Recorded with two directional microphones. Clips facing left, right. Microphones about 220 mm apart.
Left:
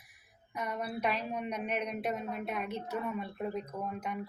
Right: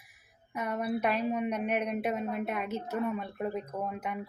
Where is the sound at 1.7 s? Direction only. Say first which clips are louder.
Right 4 dB; 55° right (ahead or behind).